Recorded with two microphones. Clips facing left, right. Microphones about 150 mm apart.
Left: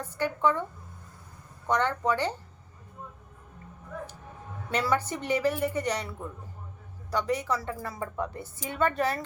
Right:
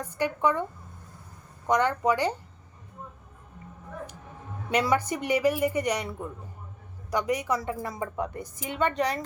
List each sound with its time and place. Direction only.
0.0 s a woman's voice: 15° right (ahead or behind)
1.6 s a woman's voice: 15° right (ahead or behind)
4.7 s a woman's voice: 15° right (ahead or behind)